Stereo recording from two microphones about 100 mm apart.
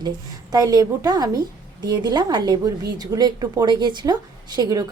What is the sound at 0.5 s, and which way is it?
A woman's voice, 40° right (ahead or behind).